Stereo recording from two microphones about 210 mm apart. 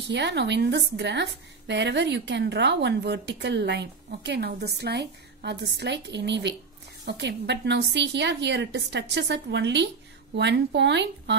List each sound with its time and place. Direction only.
0.1 s a woman's voice: 55° right (ahead or behind)